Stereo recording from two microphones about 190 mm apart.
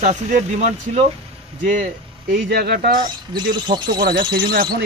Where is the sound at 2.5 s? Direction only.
55° right (ahead or behind).